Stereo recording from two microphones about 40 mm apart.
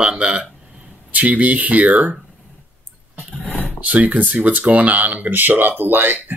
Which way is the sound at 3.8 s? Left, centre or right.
Right.